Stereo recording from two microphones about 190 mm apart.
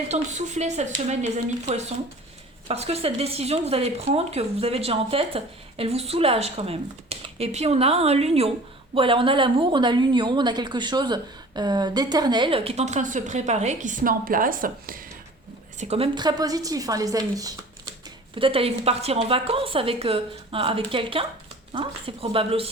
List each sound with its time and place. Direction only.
0.1 s a woman's voice: 40° right (ahead or behind)
15.8 s a woman's voice: 30° right (ahead or behind)
18.3 s a woman's voice: 30° right (ahead or behind)